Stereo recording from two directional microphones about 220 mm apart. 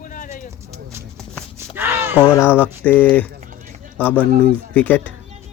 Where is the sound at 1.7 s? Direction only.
10° right (ahead or behind).